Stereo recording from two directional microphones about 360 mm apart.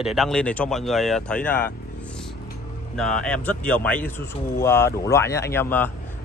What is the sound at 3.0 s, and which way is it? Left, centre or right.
Speech, centre.